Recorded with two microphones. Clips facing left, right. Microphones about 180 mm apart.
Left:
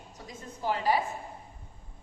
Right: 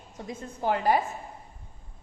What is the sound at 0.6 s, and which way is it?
Speech, 55° right (ahead or behind).